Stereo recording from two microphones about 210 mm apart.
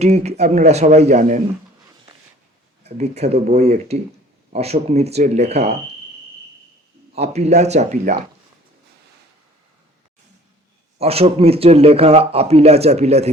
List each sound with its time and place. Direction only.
0.0 s speech: 30° right (ahead or behind)
2.8 s speech: 30° right (ahead or behind)
7.2 s speech: 30° right (ahead or behind)
10.9 s a man's voice: 30° right (ahead or behind)